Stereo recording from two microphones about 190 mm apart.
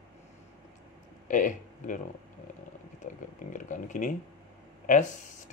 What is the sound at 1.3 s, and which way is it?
Speech, 45° left (ahead or behind).